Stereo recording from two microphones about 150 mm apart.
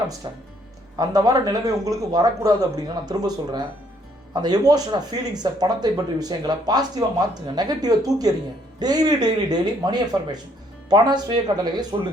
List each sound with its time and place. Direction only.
0.2 s speech: 25° right (ahead or behind)